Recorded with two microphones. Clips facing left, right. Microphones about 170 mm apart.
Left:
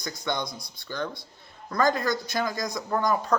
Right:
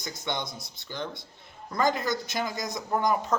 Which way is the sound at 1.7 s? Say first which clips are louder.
Left 2 dB; 20° right (ahead or behind).